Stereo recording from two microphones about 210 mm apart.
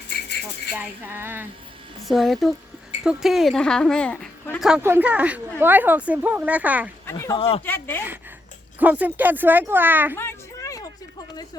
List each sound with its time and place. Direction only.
0.7 s speech: 10° right (ahead or behind); by 4.6 s 10° left (ahead or behind)
4.6 s speech: 5° right (ahead or behind)
7.0 s speech: 15° left (ahead or behind)
7.3 s speech: 25° left (ahead or behind)
7.6 s speech: 10° left (ahead or behind)
8.8 s speech: 10° right (ahead or behind)
10.2 s a sound: 15° left (ahead or behind)